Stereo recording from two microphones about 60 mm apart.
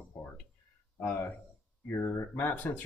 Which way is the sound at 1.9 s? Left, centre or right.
Left.